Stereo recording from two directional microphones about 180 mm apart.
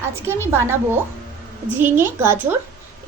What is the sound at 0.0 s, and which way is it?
A woman's voice, 15° right (ahead or behind).